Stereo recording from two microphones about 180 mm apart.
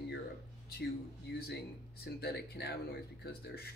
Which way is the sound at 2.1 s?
65° left (ahead or behind).